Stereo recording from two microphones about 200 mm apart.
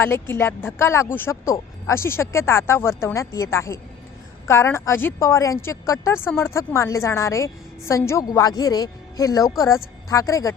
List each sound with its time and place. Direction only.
0.0 s a woman's voice: 10° left (ahead or behind)